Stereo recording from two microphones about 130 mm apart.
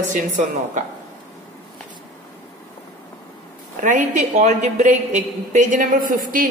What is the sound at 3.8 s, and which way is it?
A woman's voice, 70° right (ahead or behind).